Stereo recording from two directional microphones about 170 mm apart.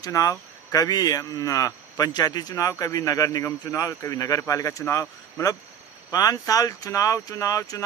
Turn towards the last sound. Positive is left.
turn(degrees=20)  # may be behind; listen again after turning